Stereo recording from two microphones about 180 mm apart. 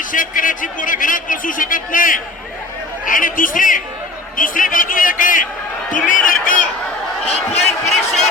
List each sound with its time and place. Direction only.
0.0 s a man's voice: 50° left (ahead or behind)
7.3 s speech: 35° left (ahead or behind)